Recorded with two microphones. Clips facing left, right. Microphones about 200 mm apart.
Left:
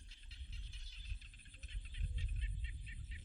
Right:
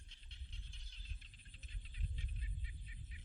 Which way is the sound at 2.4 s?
25° left (ahead or behind).